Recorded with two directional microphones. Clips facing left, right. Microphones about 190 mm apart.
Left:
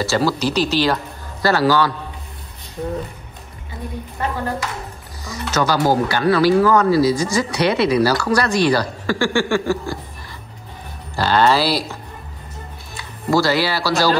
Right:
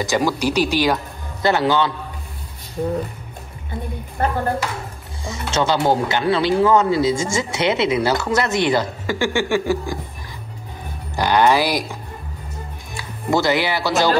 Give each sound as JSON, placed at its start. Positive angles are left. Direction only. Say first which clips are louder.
{"t": 0.0, "sound": "speech", "louder": "left 1 dB", "side_deg": -15}
{"t": 4.2, "sound": "a sound", "louder": "right 3 dB", "side_deg": -50}
{"t": 5.2, "sound": "speech", "louder": "even", "side_deg": -25}
{"t": 11.1, "sound": "speech", "louder": "even", "side_deg": -15}
{"t": 13.3, "sound": "speech", "louder": "left 1 dB", "side_deg": -20}